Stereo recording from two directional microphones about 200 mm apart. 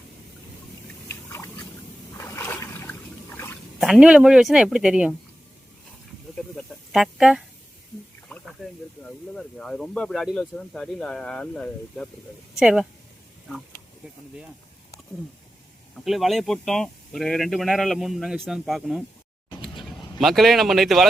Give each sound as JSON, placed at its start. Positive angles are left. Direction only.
{"t": 1.3, "sound": "a sound", "side_deg": 10}
{"t": 2.1, "sound": "boat", "side_deg": 15}
{"t": 3.3, "sound": "a sound", "side_deg": 10}
{"t": 3.8, "sound": "a man's voice", "side_deg": 0}
{"t": 6.6, "sound": "a sound", "side_deg": 0}
{"t": 8.3, "sound": "water", "side_deg": 0}
{"t": 9.3, "sound": "a man's voice", "side_deg": 5}
{"t": 16.0, "sound": "a man's voice", "side_deg": 0}
{"t": 20.1, "sound": "a man's voice", "side_deg": 0}